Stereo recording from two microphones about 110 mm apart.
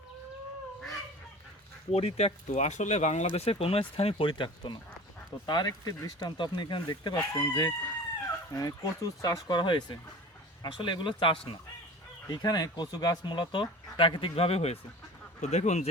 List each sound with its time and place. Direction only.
1.9 s speech: 75° left (ahead or behind); by 11.5 s 50° left (ahead or behind)
12.3 s speech: 35° left (ahead or behind); by 14.8 s 65° left (ahead or behind)
15.4 s speech: 90° left